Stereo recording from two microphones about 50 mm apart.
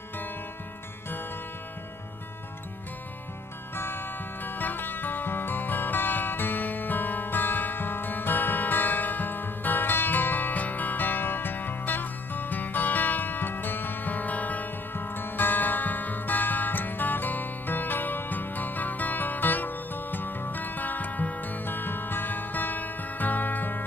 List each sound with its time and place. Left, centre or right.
3.7 s music: left